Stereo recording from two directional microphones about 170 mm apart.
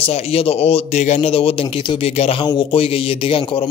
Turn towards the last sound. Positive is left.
turn(degrees=30)  # may be behind; listen again after turning